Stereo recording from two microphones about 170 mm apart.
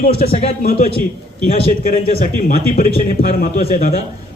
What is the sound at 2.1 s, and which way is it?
A man's voice, 40° left (ahead or behind).